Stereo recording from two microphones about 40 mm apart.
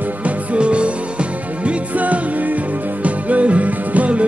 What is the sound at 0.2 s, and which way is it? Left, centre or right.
Music, right.